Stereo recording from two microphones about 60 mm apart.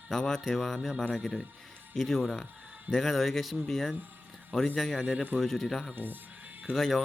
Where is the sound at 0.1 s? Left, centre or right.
Centre.